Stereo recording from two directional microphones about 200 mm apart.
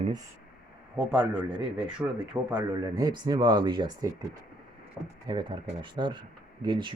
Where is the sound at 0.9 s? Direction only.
5° right (ahead or behind).